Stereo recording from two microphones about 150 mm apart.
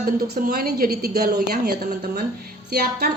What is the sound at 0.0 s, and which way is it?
A woman's voice, 75° right (ahead or behind).